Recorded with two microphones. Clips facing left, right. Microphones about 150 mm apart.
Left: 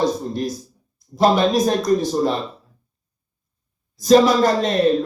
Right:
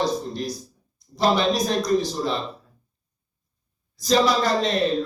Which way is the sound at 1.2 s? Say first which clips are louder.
Left 5 dB; 50° left (ahead or behind).